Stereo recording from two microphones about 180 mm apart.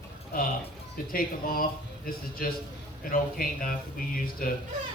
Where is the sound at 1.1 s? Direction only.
55° left (ahead or behind).